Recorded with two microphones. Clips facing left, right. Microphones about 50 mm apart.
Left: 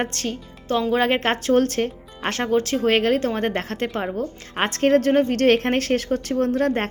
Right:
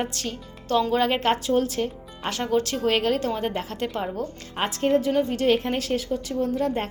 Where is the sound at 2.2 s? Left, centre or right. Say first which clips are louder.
Left 3 dB; left.